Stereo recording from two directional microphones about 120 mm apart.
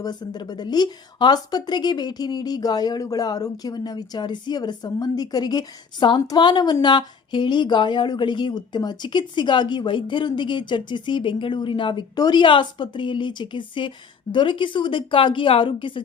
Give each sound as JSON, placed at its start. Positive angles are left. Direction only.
{"t": 0.0, "sound": "a woman's voice", "side_deg": 35}